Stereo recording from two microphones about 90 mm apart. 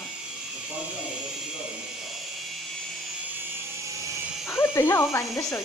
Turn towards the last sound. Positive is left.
turn(degrees=30)  # may be behind; listen again after turning